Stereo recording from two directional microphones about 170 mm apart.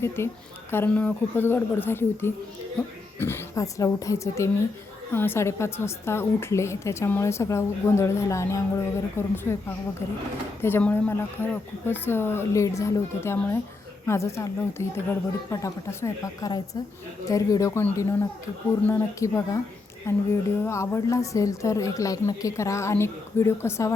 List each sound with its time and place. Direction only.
0.2 s a woman's voice: 15° left (ahead or behind)